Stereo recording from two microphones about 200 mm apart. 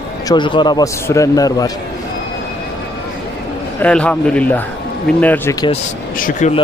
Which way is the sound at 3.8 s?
5° left (ahead or behind).